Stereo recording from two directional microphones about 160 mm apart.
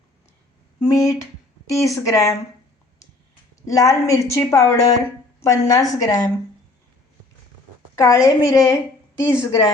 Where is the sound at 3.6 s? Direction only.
20° left (ahead or behind).